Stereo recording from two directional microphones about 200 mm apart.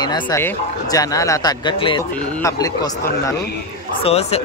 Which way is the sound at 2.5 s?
20° left (ahead or behind).